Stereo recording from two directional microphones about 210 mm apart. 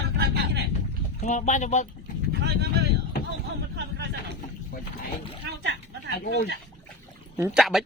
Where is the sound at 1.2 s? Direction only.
35° left (ahead or behind).